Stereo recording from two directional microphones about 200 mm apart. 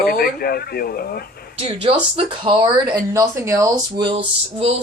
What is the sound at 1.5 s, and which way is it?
Speech, 30° right (ahead or behind).